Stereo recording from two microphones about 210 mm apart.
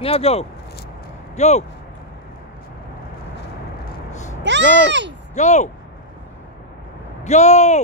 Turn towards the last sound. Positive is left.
turn(degrees=35)  # may be behind; listen again after turning